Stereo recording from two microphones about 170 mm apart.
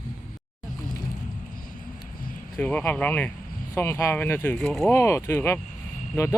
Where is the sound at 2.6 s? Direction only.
10° left (ahead or behind).